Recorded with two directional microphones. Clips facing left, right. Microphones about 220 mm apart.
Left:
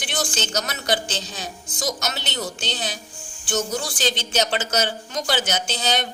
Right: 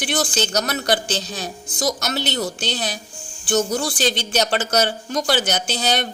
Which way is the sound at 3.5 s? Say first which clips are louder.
Right 5 dB; 35° right (ahead or behind).